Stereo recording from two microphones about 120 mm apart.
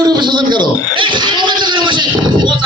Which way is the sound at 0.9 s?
40° right (ahead or behind).